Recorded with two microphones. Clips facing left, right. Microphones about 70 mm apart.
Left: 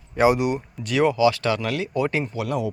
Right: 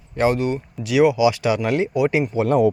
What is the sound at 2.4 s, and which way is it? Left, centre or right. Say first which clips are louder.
Speech: right 11 dB; right.